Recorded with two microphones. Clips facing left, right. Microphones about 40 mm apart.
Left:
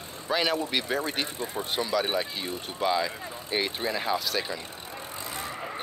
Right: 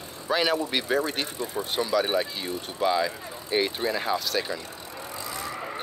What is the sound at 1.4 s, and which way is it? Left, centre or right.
Speech, left.